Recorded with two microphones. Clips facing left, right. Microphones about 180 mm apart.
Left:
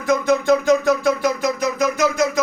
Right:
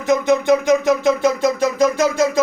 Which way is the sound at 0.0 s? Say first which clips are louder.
Right 2 dB; 20° right (ahead or behind).